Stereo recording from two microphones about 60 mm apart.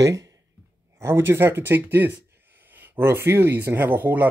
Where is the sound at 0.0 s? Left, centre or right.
Right.